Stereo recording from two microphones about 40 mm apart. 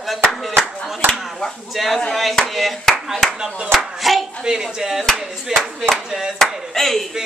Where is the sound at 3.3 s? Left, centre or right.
Right.